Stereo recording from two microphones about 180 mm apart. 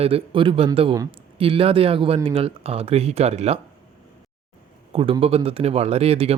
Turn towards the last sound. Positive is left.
turn(degrees=-35)  # may be behind; listen again after turning